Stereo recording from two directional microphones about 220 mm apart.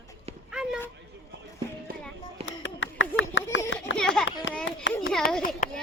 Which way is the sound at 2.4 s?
55° left (ahead or behind).